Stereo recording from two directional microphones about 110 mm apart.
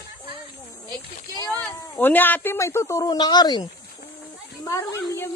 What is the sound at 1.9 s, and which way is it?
A man's voice, 15° left (ahead or behind).